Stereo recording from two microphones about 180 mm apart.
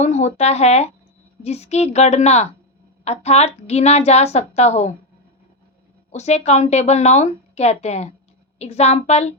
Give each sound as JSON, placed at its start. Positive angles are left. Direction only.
{"t": 0.0, "sound": "speech", "side_deg": 40}
{"t": 6.1, "sound": "speech", "side_deg": 40}